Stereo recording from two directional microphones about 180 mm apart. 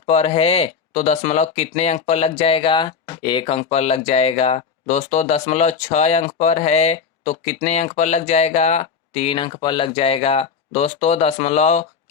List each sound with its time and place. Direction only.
0.0 s speech: 35° left (ahead or behind)